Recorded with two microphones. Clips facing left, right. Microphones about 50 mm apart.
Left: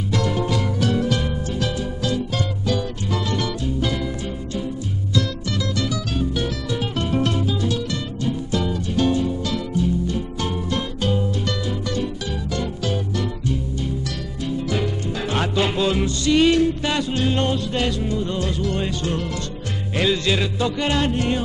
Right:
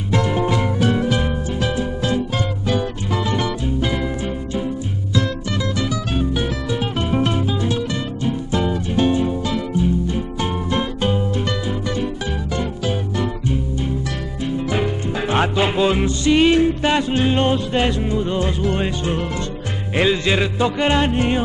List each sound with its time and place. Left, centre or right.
0.1 s music: right
5.8 s music: right